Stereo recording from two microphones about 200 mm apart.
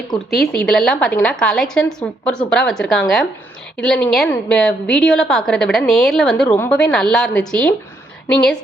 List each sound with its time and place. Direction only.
0.5 s a woman's voice: 5° left (ahead or behind)